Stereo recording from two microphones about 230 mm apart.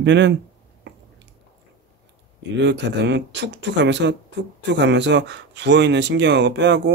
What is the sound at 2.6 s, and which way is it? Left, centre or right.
Speech, right.